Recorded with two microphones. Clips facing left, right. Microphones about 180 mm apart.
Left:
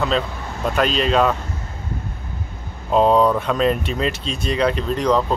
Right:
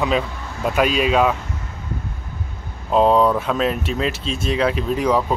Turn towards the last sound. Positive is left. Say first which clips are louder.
# even
turn(degrees=-5)  # may be behind; listen again after turning